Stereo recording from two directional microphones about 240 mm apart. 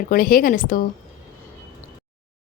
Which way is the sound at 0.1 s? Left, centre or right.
Left.